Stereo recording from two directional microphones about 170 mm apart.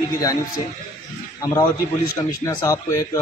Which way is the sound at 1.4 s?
20° left (ahead or behind).